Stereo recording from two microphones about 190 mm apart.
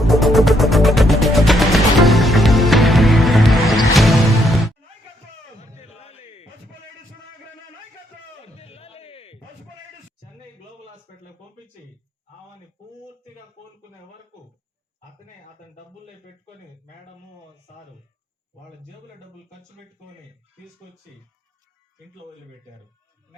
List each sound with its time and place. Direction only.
0.0 s music: centre (ahead or behind)
5.8 s a sound: 35° left (ahead or behind)
8.5 s music: 30° left (ahead or behind)